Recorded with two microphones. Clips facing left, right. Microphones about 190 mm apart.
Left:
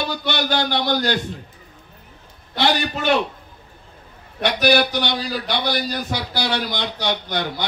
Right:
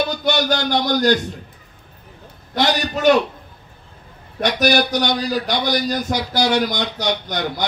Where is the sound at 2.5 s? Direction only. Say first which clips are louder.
Right 1 dB; 45° right (ahead or behind).